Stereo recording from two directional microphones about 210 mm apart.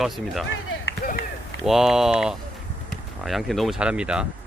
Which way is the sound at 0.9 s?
50° left (ahead or behind).